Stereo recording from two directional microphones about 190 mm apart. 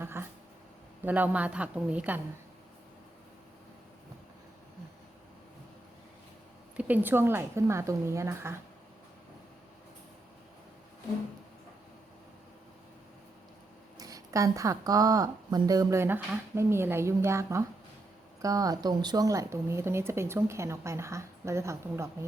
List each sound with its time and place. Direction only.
0.0 s speech: 10° right (ahead or behind)
6.7 s speech: 10° right (ahead or behind)
14.0 s speech: 15° right (ahead or behind)